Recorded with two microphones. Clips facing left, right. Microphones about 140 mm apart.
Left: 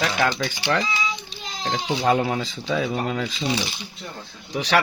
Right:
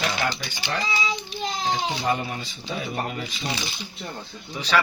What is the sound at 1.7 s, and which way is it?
Speech, 90° left.